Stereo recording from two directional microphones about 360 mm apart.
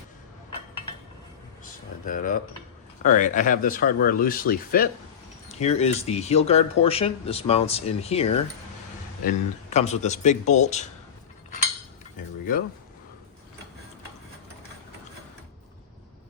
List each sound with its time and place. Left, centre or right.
2.0 s speech: left
9.6 s speech: centre